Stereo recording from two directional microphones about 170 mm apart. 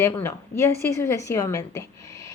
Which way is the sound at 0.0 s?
15° left (ahead or behind).